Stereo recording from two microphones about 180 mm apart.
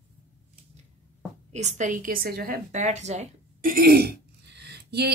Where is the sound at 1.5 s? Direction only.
40° right (ahead or behind).